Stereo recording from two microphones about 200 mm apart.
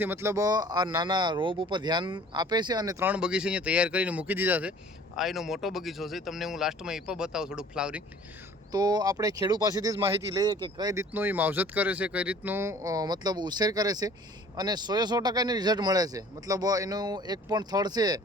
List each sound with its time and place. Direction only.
0.0 s speech: 10° right (ahead or behind)
8.7 s speech: 20° right (ahead or behind)
11.1 s speech: 10° right (ahead or behind)